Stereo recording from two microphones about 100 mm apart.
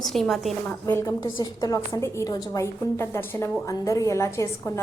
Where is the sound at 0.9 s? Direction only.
30° left (ahead or behind).